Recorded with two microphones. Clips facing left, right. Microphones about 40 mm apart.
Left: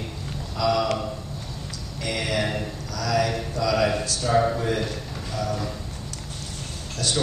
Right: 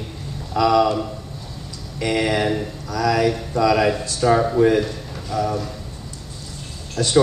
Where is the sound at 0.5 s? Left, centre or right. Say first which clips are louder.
Right 7 dB; right.